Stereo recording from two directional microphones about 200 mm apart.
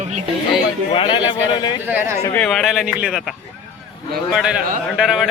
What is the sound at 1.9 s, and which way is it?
Speech, 10° right (ahead or behind).